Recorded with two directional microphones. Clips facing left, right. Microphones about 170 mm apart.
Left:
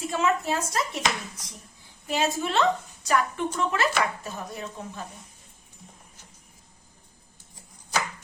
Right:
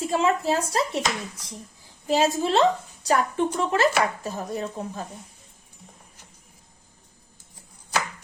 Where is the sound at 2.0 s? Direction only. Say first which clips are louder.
Right 5 dB; 35° right (ahead or behind).